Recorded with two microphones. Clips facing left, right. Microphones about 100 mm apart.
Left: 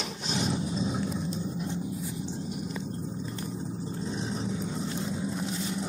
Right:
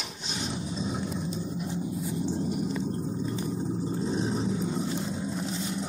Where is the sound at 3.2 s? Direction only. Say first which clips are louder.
Right 5 dB; 5° right (ahead or behind).